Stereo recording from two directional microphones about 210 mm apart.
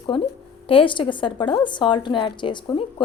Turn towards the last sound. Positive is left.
turn(degrees=25)  # may be behind; listen again after turning